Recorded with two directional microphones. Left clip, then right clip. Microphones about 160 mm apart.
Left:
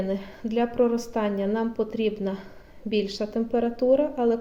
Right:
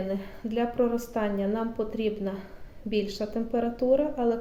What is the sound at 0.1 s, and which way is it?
A woman's voice, 35° left (ahead or behind).